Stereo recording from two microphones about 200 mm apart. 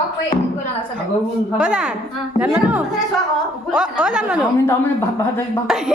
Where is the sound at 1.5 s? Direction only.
5° right (ahead or behind).